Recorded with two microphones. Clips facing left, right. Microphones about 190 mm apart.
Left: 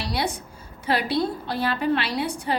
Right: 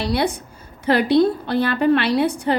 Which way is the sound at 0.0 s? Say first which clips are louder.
Right 7 dB; 55° right (ahead or behind).